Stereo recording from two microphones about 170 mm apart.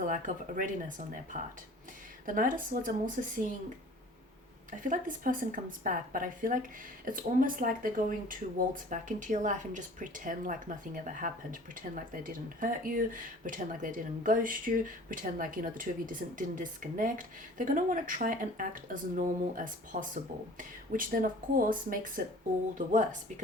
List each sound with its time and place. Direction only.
0.0 s speech: 50° right (ahead or behind)
4.7 s speech: 50° right (ahead or behind)